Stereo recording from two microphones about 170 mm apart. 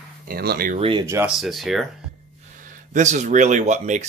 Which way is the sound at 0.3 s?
65° right (ahead or behind).